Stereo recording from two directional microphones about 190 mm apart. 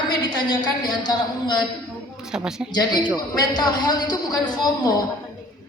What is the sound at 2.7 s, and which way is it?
A man's voice, 20° left (ahead or behind).